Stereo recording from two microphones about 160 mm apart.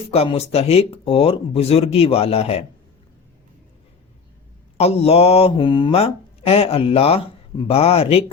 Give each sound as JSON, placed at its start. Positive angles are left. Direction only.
{"t": 0.1, "sound": "speech", "side_deg": 40}
{"t": 4.8, "sound": "speech", "side_deg": 40}